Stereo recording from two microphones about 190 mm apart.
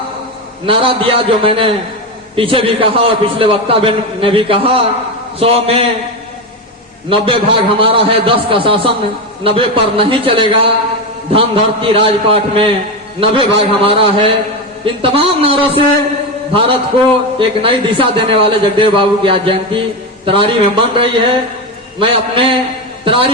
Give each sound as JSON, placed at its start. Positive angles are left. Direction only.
{"t": 0.6, "sound": "a man's voice", "side_deg": -25}
{"t": 7.1, "sound": "a man's voice", "side_deg": -30}